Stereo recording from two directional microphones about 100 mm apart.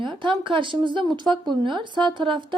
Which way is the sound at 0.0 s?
55° right (ahead or behind).